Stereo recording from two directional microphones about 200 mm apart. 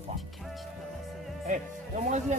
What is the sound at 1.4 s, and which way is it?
Speech, 40° right (ahead or behind).